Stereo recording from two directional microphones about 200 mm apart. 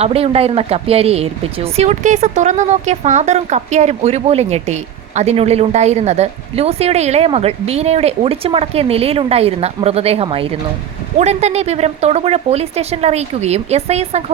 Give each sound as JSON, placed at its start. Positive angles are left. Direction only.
{"t": 0.0, "sound": "speech", "side_deg": -30}